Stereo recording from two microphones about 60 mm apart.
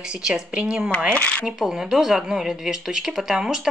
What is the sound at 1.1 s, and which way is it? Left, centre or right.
Speech, left.